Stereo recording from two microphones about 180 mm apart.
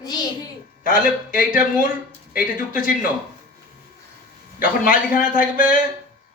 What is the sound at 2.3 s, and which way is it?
Speech, 50° left (ahead or behind).